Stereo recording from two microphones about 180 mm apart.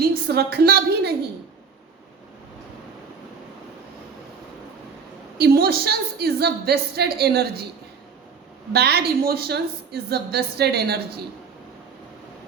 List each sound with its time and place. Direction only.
0.3 s a woman's voice: 65° right (ahead or behind)
5.4 s a woman's voice: 60° right (ahead or behind)
8.7 s a woman's voice: 65° right (ahead or behind)